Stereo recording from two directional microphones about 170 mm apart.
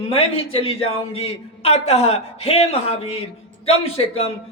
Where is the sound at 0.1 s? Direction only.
35° left (ahead or behind).